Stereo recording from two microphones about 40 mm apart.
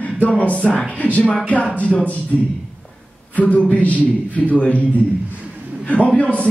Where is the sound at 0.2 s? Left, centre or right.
Left.